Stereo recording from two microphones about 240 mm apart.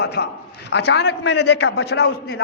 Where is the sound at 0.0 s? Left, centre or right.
Left.